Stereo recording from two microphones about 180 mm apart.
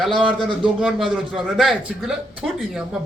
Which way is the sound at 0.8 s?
5° right (ahead or behind).